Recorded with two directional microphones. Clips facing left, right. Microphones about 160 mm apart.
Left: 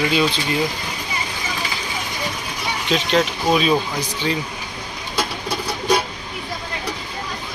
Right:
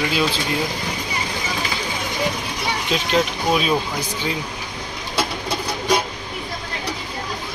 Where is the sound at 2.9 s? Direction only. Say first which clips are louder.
Left 2 dB; 10° right (ahead or behind).